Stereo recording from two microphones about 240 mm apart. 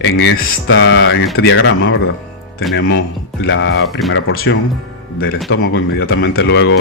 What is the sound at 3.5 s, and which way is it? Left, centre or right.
Speech, left.